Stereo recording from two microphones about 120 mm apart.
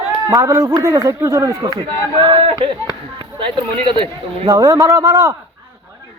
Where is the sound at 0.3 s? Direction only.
30° right (ahead or behind); by 4.4 s 45° right (ahead or behind).